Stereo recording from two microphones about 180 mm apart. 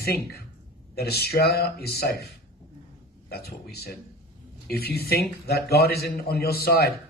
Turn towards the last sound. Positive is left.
turn(degrees=60)  # may be behind; listen again after turning